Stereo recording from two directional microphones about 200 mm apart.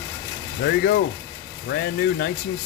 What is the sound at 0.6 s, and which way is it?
Speech, 50° left (ahead or behind).